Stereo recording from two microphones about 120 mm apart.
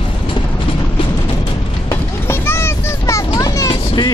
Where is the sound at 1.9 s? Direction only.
20° left (ahead or behind).